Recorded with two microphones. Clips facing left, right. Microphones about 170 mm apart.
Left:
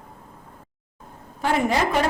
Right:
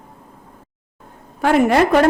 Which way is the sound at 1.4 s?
60° right (ahead or behind).